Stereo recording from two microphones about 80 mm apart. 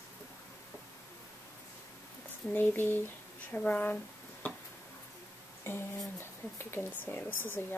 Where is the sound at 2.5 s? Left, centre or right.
Left.